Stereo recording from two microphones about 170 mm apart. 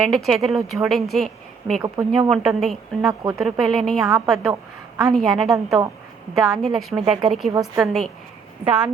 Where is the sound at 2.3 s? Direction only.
Centre (ahead or behind).